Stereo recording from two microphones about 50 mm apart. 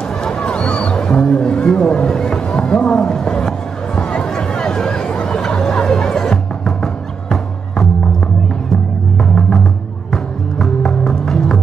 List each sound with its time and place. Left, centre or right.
0.2 s a sound: left
4.2 s chatter: centre
10.1 s music: centre